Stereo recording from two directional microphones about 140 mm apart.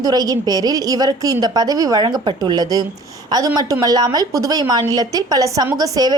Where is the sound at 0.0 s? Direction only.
25° right (ahead or behind).